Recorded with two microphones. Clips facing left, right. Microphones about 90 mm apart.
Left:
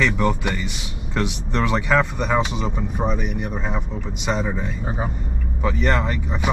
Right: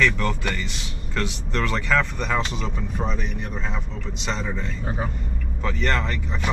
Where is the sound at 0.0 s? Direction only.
15° left (ahead or behind).